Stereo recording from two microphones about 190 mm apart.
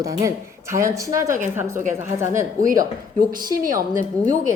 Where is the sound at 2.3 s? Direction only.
45° right (ahead or behind).